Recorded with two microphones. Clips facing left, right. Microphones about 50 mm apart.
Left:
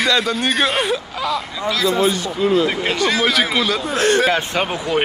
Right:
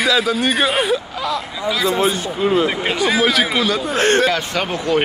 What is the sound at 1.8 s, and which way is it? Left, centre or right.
Speech, right.